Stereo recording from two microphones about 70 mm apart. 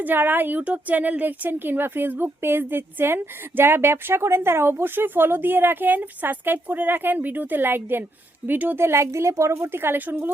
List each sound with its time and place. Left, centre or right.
0.0 s a woman's voice: right